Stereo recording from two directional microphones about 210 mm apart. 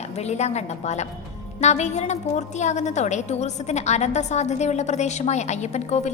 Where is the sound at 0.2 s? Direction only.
30° left (ahead or behind).